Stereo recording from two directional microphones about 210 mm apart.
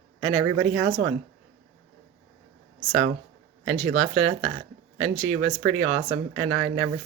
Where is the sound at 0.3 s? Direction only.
90° right.